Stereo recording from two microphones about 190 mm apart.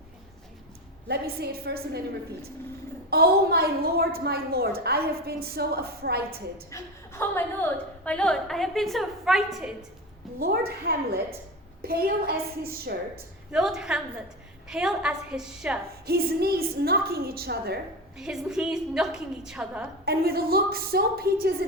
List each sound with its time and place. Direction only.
1.0 s a woman's voice: 60° right (ahead or behind)
3.1 s a woman's voice: 55° right (ahead or behind)
6.7 s a woman's voice: 15° left (ahead or behind); by 9.7 s centre (ahead or behind)
10.4 s a woman's voice: 55° right (ahead or behind)
13.5 s a woman's voice: 5° right (ahead or behind)
16.0 s a woman's voice: 55° right (ahead or behind)
18.2 s a woman's voice: 5° right (ahead or behind)
20.1 s a woman's voice: 55° right (ahead or behind)